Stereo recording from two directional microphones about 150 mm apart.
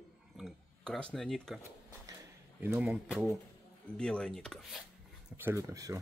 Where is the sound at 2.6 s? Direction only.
10° right (ahead or behind).